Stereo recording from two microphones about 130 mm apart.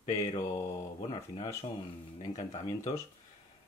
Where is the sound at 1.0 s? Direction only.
40° left (ahead or behind).